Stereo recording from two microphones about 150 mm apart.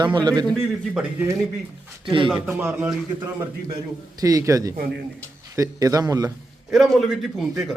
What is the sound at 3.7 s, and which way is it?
A man's voice, 25° right (ahead or behind).